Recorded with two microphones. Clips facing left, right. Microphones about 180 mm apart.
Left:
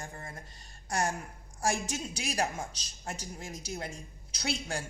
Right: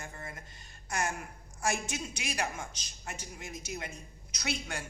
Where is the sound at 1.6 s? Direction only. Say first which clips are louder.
Left 2 dB; 40° left (ahead or behind).